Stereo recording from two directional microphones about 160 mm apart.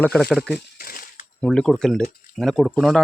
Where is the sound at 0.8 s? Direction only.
65° left (ahead or behind).